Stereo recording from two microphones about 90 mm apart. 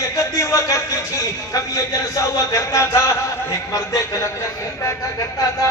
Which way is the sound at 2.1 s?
35° left (ahead or behind).